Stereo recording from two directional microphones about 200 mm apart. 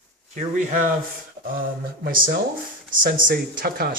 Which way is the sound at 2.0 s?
45° right (ahead or behind).